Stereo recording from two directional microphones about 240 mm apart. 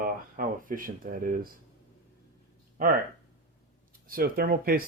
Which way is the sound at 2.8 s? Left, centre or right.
Right.